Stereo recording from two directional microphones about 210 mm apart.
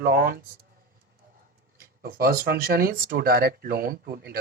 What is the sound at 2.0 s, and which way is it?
Speech, 45° right (ahead or behind).